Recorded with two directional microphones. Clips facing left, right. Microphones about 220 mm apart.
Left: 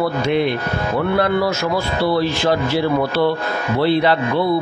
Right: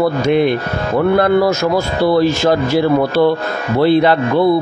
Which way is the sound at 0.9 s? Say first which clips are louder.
Right 6 dB; 45° right (ahead or behind).